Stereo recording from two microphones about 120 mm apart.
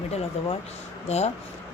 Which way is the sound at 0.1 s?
55° left (ahead or behind).